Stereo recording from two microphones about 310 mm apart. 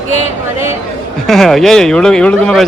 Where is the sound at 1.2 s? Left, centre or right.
Centre.